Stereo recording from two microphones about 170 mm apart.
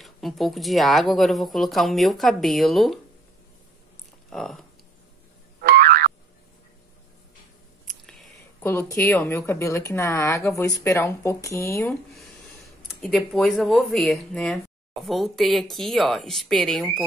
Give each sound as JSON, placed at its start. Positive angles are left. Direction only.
{"t": 0.0, "sound": "a woman's voice", "side_deg": 0}
{"t": 4.3, "sound": "speech", "side_deg": 0}
{"t": 5.6, "sound": "boing", "side_deg": -60}
{"t": 7.8, "sound": "a sound", "side_deg": 5}
{"t": 8.6, "sound": "speech", "side_deg": 15}
{"t": 11.9, "sound": "a woman's voice", "side_deg": 0}